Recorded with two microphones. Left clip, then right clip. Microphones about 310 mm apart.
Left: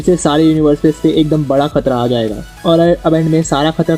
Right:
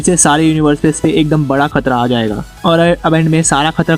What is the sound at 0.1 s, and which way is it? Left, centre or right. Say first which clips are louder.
Speech: right 1 dB; right.